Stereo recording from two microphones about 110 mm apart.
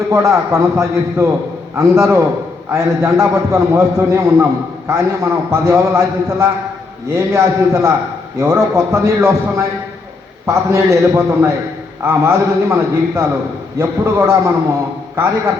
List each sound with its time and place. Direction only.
0.1 s a man's voice: 25° right (ahead or behind)